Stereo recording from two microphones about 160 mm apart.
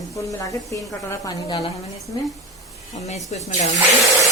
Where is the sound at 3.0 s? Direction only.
45° left (ahead or behind).